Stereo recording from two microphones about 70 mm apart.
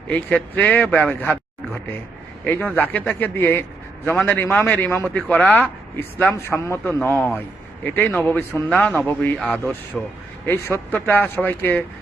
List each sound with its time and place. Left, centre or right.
0.1 s speech: left
0.9 s a sound: left
2.4 s a man's voice: left
6.3 s a man's voice: left
9.4 s speech: centre
10.4 s speech: left